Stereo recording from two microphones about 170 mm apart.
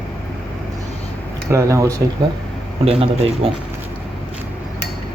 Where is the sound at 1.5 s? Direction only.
15° right (ahead or behind).